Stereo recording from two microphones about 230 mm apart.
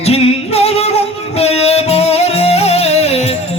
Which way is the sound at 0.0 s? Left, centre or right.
Left.